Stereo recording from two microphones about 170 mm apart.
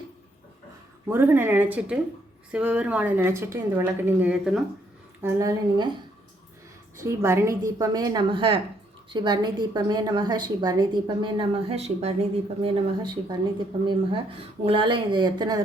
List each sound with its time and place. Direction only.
1.0 s a woman's voice: 15° right (ahead or behind)
5.2 s a woman's voice: 15° right (ahead or behind)
7.0 s a woman's voice: 15° right (ahead or behind); by 12.1 s 35° right (ahead or behind)
12.6 s a woman's voice: 25° right (ahead or behind)